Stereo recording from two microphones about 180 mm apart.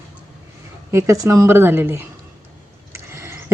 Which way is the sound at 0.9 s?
15° right (ahead or behind).